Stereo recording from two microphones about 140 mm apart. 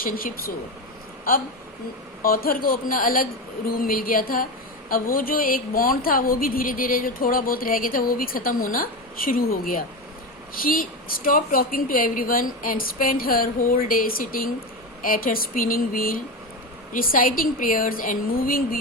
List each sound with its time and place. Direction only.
0.0 s a woman's voice: 90° left
2.2 s a woman's voice: 90° left